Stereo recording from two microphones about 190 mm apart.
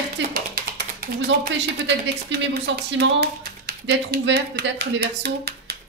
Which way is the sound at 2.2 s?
65° right (ahead or behind).